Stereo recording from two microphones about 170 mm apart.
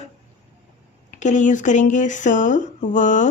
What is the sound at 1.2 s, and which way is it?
Speech, 45° left (ahead or behind).